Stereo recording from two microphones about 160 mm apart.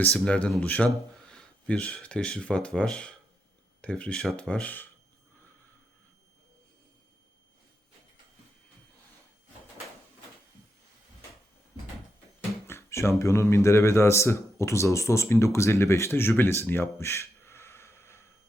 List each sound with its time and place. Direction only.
0.0 s speech: 5° left (ahead or behind)
12.6 s speech: 15° left (ahead or behind)